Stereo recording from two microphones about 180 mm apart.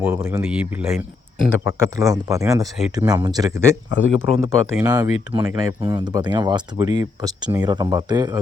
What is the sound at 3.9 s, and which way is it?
Speech, 90° left.